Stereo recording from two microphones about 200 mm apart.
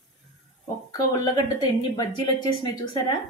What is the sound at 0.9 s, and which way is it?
Speech, 20° left (ahead or behind).